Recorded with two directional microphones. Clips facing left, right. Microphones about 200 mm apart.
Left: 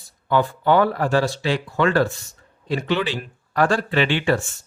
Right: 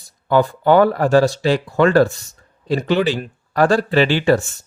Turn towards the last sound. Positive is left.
turn(degrees=-40)  # may be behind; listen again after turning